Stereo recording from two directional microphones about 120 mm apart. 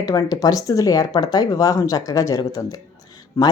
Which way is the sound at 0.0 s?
35° left (ahead or behind).